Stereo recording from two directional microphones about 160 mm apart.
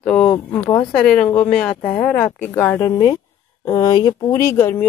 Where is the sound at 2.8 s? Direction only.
30° left (ahead or behind).